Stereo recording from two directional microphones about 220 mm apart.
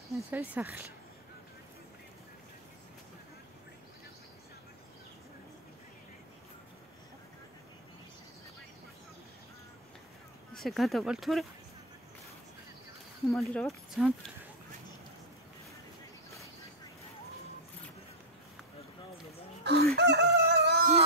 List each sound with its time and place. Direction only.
0.1 s speech: 5° right (ahead or behind)
10.5 s speech: centre (ahead or behind)
13.3 s speech: centre (ahead or behind)
19.6 s chicken: 50° right (ahead or behind)